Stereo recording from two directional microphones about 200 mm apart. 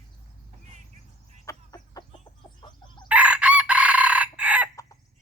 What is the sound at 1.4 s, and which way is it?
Chicken, 20° left (ahead or behind).